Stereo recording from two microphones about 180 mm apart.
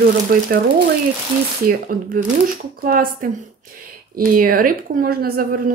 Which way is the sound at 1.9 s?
55° right (ahead or behind).